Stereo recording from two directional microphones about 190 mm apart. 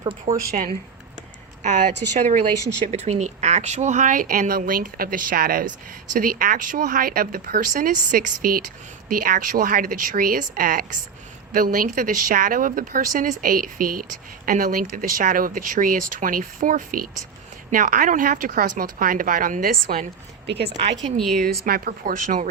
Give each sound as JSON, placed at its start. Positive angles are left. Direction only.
{"t": 0.0, "sound": "speech", "side_deg": -25}
{"t": 0.3, "sound": "speech", "side_deg": -45}
{"t": 20.5, "sound": "speech", "side_deg": -60}
{"t": 21.2, "sound": "speech", "side_deg": 0}
{"t": 21.4, "sound": "speech", "side_deg": -50}